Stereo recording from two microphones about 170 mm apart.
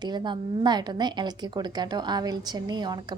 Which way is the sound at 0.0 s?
25° right (ahead or behind).